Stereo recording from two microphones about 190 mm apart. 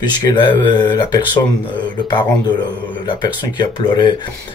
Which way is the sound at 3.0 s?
25° left (ahead or behind).